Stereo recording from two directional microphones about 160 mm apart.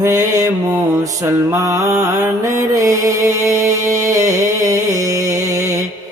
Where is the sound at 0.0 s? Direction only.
20° right (ahead or behind).